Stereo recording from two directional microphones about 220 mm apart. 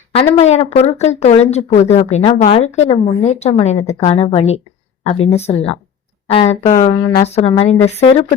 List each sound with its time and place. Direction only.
0.3 s speech: 30° left (ahead or behind)
7.0 s speech: 20° left (ahead or behind)